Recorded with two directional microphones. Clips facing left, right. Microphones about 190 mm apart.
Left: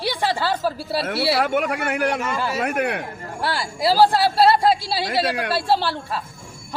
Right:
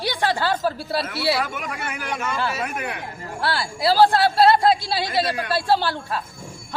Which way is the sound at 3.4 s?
15° left (ahead or behind).